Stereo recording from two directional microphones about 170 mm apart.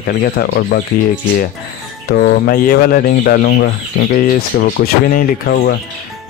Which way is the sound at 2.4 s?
60° left (ahead or behind).